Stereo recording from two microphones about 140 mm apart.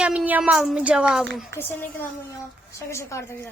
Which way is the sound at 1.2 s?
5° left (ahead or behind).